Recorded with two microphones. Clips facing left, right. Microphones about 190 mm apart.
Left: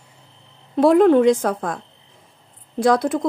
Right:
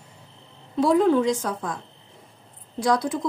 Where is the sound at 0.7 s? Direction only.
60° left (ahead or behind).